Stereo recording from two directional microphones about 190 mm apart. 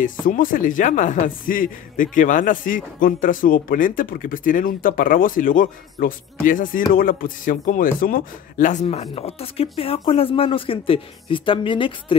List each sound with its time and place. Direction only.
0.0 s speech: 45° left (ahead or behind)
8.8 s speech: 30° left (ahead or behind)